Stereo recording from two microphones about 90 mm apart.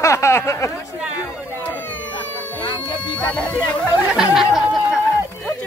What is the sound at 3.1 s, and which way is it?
Speech, 15° left (ahead or behind).